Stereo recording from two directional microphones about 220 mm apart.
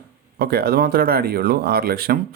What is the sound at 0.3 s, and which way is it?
Speech, 45° right (ahead or behind).